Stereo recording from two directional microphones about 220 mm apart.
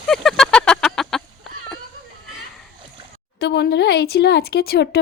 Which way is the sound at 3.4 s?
50° left (ahead or behind).